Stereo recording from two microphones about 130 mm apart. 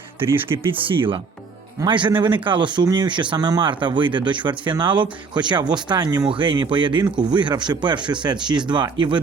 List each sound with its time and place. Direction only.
0.4 s speech: 40° right (ahead or behind)